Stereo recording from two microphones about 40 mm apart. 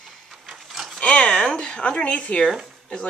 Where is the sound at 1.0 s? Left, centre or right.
Left.